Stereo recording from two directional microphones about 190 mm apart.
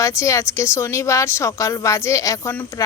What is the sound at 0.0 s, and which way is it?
A woman's voice, 15° left (ahead or behind).